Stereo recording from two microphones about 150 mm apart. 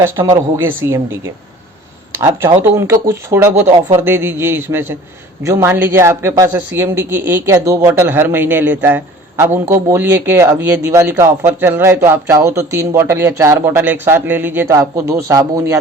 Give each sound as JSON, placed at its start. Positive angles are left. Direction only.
{"t": 0.0, "sound": "speech", "side_deg": -20}
{"t": 2.1, "sound": "speech", "side_deg": -15}